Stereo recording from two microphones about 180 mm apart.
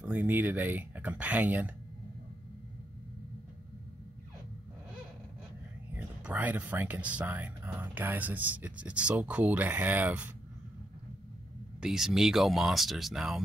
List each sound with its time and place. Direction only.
0.0 s speech: 10° right (ahead or behind)
5.9 s speech: 10° right (ahead or behind)
11.8 s speech: centre (ahead or behind)